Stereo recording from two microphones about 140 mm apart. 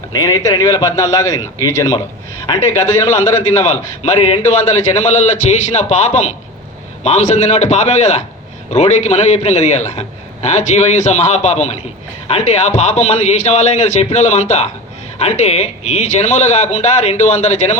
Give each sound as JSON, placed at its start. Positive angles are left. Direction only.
{"t": 0.1, "sound": "a man's voice", "side_deg": 25}
{"t": 4.0, "sound": "speech", "side_deg": 45}